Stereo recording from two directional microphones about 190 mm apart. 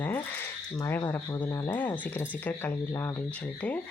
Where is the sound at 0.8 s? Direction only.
10° left (ahead or behind).